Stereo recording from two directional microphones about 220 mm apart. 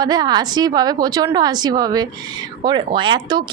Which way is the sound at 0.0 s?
20° right (ahead or behind).